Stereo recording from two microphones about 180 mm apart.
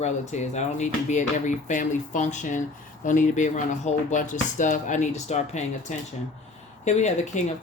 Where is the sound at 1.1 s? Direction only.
45° left (ahead or behind).